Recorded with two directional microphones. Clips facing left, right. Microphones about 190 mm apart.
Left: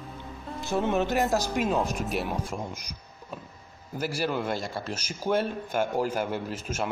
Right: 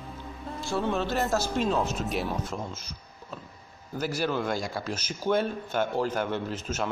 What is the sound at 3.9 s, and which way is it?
A man's voice, 5° left (ahead or behind).